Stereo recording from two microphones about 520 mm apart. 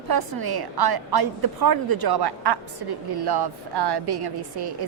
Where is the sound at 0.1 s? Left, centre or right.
Right.